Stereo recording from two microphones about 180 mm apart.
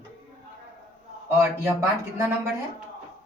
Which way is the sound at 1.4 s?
15° right (ahead or behind).